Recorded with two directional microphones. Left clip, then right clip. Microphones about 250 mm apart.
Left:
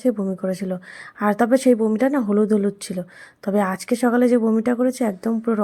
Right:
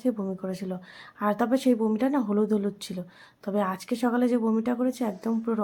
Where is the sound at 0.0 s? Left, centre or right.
Left.